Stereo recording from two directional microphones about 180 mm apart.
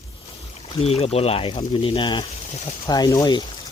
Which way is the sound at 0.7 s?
35° left (ahead or behind).